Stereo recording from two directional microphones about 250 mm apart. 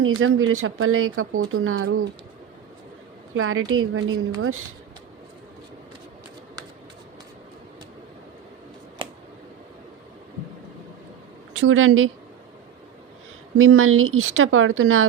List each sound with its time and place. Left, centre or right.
0.2 s speech: right
3.3 s speech: right
11.5 s a woman's voice: right
13.6 s speech: right